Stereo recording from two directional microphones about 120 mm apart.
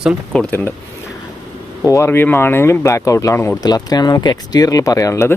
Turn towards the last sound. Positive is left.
turn(degrees=25)  # may be behind; listen again after turning